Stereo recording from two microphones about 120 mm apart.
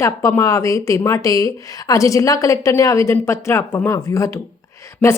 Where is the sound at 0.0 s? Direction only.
25° left (ahead or behind).